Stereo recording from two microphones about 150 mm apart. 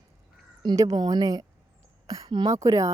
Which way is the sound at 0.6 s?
25° right (ahead or behind).